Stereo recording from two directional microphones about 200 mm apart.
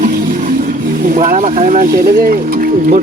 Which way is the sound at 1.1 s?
40° right (ahead or behind).